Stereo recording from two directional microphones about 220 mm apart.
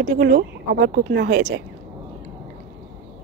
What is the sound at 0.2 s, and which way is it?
Speech, 45° right (ahead or behind).